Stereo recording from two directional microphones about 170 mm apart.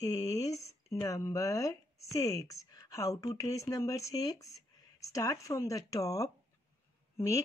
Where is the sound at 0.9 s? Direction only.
20° left (ahead or behind).